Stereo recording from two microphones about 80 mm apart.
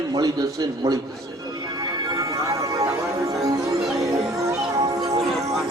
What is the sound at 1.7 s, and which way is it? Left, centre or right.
Music, right.